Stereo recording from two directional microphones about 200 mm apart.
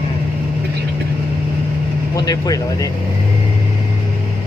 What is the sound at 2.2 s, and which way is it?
Speech, 20° left (ahead or behind).